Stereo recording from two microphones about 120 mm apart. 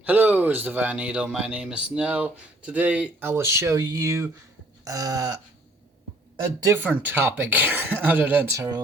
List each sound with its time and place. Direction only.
0.0 s speech: 10° right (ahead or behind)
4.9 s a sound: 30° right (ahead or behind)
6.8 s speech: 15° right (ahead or behind)
8.5 s speech: 25° right (ahead or behind)